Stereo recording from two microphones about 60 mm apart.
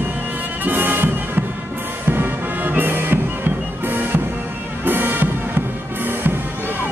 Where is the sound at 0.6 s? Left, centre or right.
Right.